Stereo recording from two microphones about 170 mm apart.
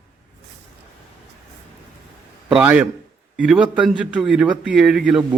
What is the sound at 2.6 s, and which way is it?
A man's voice, 10° right (ahead or behind).